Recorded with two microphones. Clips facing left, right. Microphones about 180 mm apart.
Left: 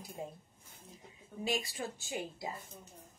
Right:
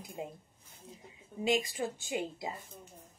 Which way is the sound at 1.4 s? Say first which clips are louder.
Right 5 dB; 20° right (ahead or behind).